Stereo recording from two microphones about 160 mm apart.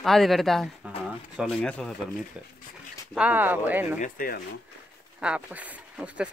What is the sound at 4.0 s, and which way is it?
Speech, 60° left (ahead or behind).